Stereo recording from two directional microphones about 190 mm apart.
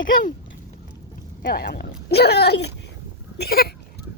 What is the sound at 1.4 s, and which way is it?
Speech, 55° left (ahead or behind).